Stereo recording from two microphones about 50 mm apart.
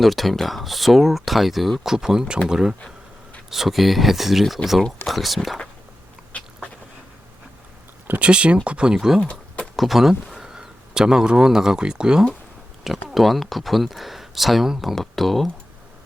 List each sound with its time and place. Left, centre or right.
0.0 s speech: centre
6.3 s a sound: left
8.2 s speech: right
8.9 s speech: centre
9.2 s a sound: left
9.7 s speech: centre
12.8 s speech: centre